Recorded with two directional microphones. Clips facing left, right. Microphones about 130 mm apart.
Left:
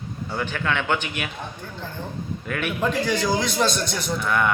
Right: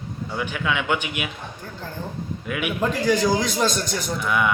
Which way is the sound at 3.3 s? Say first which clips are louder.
Right 1 dB; 40° right (ahead or behind).